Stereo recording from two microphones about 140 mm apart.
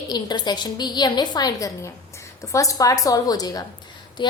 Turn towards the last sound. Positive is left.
turn(degrees=25)  # may be behind; listen again after turning